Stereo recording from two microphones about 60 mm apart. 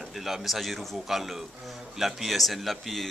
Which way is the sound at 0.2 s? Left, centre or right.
Centre.